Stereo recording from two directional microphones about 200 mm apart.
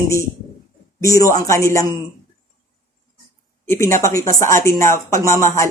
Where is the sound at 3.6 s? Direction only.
15° left (ahead or behind).